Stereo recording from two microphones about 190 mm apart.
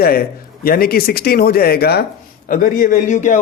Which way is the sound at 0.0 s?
50° left (ahead or behind).